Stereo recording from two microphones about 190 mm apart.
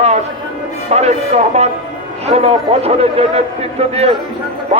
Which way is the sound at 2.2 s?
35° right (ahead or behind).